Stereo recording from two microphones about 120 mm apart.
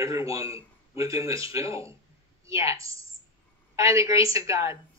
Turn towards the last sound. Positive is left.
turn(degrees=-25)  # may be behind; listen again after turning